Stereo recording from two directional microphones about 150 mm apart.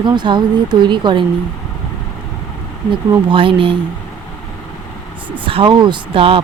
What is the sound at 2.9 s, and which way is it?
Speech, 35° right (ahead or behind).